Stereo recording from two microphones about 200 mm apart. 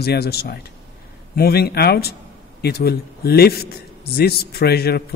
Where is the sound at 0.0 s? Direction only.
50° left (ahead or behind).